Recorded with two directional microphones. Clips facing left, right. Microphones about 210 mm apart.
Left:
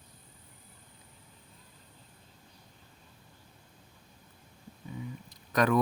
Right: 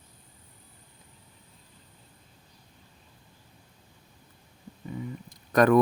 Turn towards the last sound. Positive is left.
turn(degrees=-50)  # may be behind; listen again after turning